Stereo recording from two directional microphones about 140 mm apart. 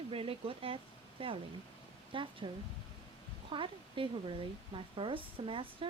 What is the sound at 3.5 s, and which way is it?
A woman's voice, 35° right (ahead or behind).